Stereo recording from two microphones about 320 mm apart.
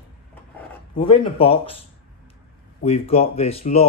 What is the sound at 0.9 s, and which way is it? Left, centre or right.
Speech, centre.